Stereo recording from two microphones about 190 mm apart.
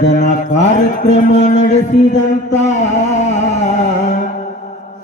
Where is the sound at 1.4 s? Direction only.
40° left (ahead or behind).